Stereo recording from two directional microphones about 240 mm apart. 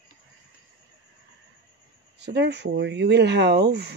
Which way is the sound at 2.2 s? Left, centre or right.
Right.